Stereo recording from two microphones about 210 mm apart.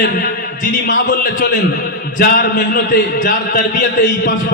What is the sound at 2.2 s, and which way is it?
A man's voice, 45° left (ahead or behind).